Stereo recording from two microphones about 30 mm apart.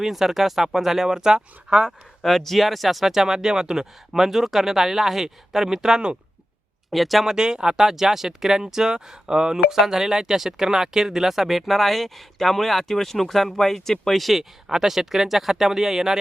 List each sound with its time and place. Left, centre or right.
0.0 s speech: centre
2.2 s speech: centre
6.9 s speech: centre
7.3 s speech: right
9.7 s speech: centre
14.7 s speech: centre